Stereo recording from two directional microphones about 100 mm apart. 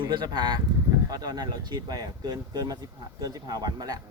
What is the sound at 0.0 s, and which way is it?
Speech, 50° right (ahead or behind).